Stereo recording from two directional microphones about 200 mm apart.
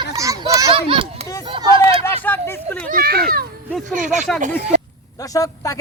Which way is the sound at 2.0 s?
10° left (ahead or behind).